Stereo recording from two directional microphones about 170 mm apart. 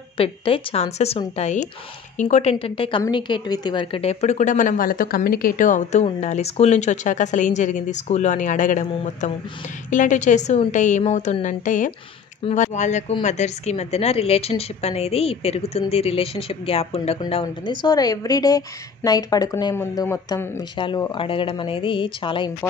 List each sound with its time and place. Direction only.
0.2 s a woman's voice: 35° left (ahead or behind)